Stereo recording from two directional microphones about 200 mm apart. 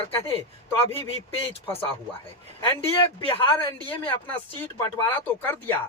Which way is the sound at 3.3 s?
25° left (ahead or behind).